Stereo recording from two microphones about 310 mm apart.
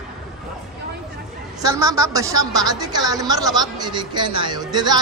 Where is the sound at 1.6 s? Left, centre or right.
Centre.